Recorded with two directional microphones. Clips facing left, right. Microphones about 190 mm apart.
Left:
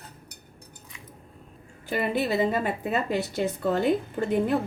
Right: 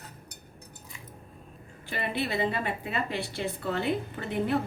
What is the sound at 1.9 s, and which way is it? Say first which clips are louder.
A woman's voice: left 6 dB; 45° left (ahead or behind).